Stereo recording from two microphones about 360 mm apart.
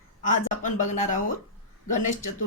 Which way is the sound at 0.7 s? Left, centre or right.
Centre.